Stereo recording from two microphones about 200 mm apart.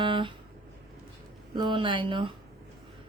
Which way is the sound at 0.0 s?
25° right (ahead or behind).